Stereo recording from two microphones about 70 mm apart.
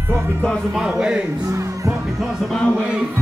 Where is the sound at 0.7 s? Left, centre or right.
Centre.